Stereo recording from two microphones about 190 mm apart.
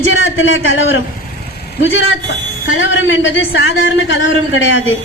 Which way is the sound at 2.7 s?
80° left.